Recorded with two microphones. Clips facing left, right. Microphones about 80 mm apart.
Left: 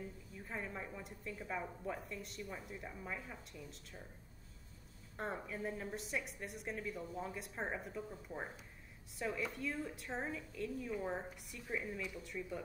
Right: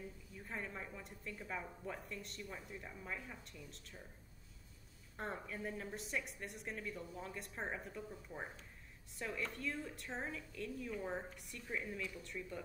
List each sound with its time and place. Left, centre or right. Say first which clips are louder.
0.4 s a woman's voice: left 1 dB; centre
5.1 s a woman's voice: left 2 dB; centre